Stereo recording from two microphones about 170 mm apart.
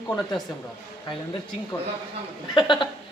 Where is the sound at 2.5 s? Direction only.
25° left (ahead or behind).